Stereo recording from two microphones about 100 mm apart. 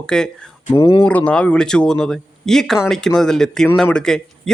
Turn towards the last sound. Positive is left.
turn(degrees=5)  # may be behind; listen again after turning